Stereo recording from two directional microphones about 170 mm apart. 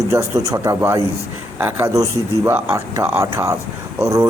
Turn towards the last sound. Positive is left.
turn(degrees=-15)  # may be behind; listen again after turning